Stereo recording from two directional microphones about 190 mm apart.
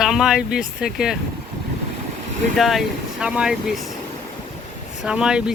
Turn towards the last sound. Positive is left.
turn(degrees=-5)  # may be behind; listen again after turning